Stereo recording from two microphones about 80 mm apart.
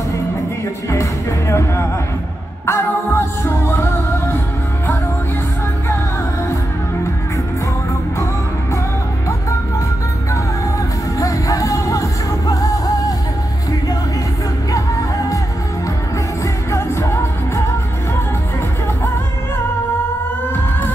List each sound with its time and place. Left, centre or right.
1.5 s speech: left
2.6 s music: left
11.1 s music: left
14.7 s music: left
16.7 s music: left